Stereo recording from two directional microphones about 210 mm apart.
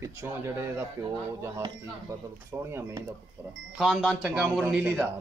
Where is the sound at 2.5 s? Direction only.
10° right (ahead or behind).